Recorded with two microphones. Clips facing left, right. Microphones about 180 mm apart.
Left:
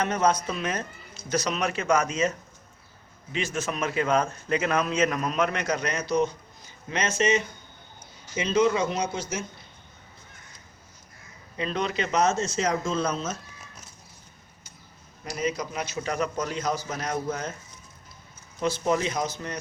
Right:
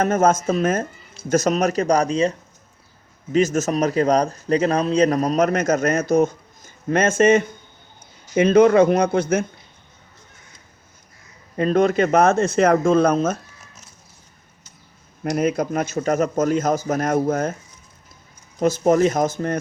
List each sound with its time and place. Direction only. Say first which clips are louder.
0.0 s a man's voice: right 7 dB; 45° right (ahead or behind)
3.3 s a man's voice: right 11 dB; 45° right (ahead or behind)
11.5 s speech: right 11 dB; 50° right (ahead or behind)
15.2 s a man's voice: right 9 dB; 55° right (ahead or behind)
18.6 s a man's voice: right 9 dB; 45° right (ahead or behind)